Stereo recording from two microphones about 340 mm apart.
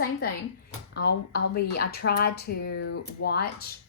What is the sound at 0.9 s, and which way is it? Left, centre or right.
Speech, left.